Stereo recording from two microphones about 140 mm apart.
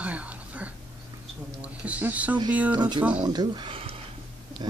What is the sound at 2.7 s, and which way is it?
Speech, 30° right (ahead or behind).